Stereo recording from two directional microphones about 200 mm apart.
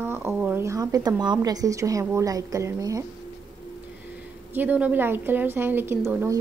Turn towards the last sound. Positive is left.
turn(degrees=-10)  # may be behind; listen again after turning